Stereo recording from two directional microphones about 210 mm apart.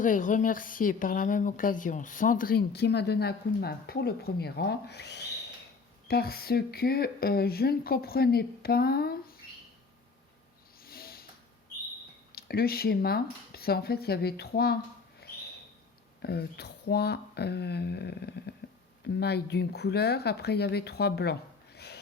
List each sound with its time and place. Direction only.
0.0 s a woman's voice: 40° left (ahead or behind)
10.8 s a sound: 45° left (ahead or behind)
12.3 s speech: 45° left (ahead or behind)
15.2 s bird: 50° left (ahead or behind)
16.2 s speech: 50° left (ahead or behind)